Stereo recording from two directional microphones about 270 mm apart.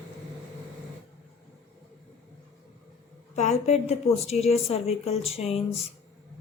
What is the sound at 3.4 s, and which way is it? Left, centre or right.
A woman's voice, left.